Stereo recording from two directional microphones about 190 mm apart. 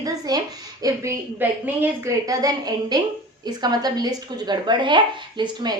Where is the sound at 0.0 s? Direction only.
20° right (ahead or behind).